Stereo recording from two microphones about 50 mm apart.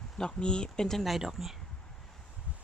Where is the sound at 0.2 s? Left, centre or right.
Centre.